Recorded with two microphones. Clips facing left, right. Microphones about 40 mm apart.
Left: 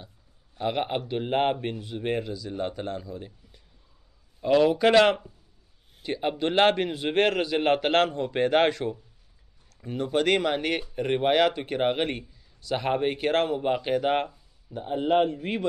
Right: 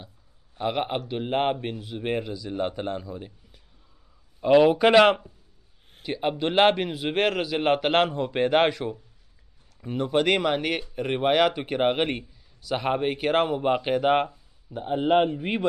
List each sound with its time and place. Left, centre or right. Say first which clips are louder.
0.6 s a man's voice: right 1 dB; centre
12.6 s speech: even; centre